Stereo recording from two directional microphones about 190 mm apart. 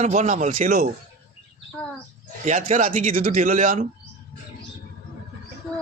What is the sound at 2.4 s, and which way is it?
A man's voice, 40° right (ahead or behind).